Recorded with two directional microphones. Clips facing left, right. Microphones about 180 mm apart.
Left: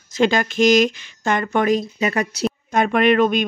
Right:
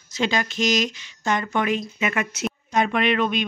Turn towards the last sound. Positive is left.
turn(degrees=45)  # may be behind; listen again after turning